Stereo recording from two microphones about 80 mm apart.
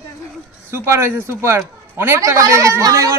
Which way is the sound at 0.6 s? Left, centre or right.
Right.